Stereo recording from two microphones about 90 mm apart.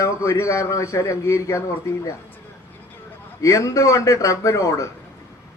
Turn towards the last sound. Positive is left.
turn(degrees=35)  # may be behind; listen again after turning